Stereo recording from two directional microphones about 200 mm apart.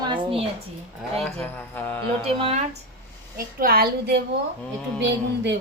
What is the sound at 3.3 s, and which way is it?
A woman's voice, 45° right (ahead or behind).